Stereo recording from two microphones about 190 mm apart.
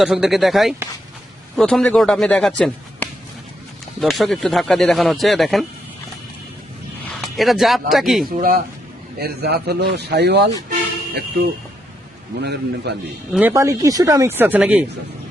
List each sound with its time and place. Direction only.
0.0 s speech: 5° right (ahead or behind)
7.1 s speech: centre (ahead or behind)
8.4 s a man's voice: 50° right (ahead or behind)
12.4 s a man's voice: 60° right (ahead or behind)
13.3 s speech: 10° right (ahead or behind)